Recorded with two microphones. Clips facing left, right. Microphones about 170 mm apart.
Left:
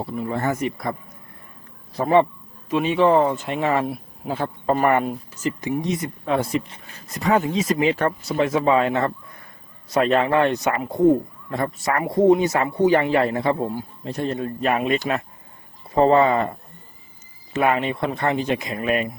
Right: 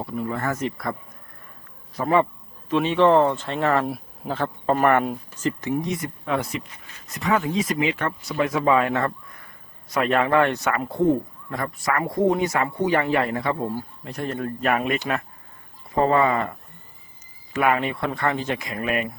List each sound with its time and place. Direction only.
0.0 s speech: 30° left (ahead or behind)
0.5 s speech: 15° left (ahead or behind)
2.0 s speech: 30° left (ahead or behind)
2.6 s speech: 10° left (ahead or behind)
3.4 s speech: 15° left (ahead or behind)
3.8 s a sound: centre (ahead or behind)
4.3 s speech: 10° left (ahead or behind)
5.8 s speech: 25° left (ahead or behind)
7.8 s speech: 35° left (ahead or behind)
8.3 s speech: 25° left (ahead or behind)